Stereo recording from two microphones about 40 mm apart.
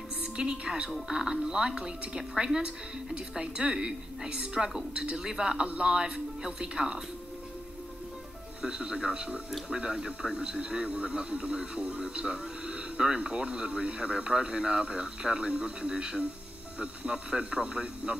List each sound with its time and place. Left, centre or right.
0.2 s a woman's voice: right
0.8 s speech: centre
8.6 s a man's voice: right